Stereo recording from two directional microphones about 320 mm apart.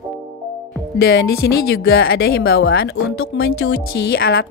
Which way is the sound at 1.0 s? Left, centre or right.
Left.